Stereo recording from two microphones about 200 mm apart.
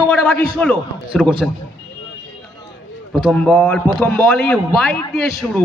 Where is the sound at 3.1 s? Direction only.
5° left (ahead or behind).